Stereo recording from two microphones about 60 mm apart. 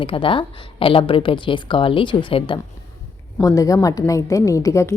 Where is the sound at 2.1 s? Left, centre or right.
Left.